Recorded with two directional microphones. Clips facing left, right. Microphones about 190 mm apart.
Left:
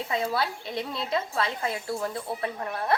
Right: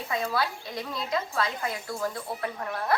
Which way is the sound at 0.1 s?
25° left (ahead or behind).